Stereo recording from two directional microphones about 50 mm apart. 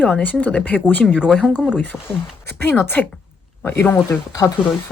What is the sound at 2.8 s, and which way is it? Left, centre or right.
Speech, left.